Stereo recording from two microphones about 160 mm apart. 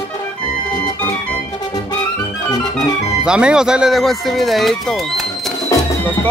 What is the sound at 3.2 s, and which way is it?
Speech, 5° right (ahead or behind).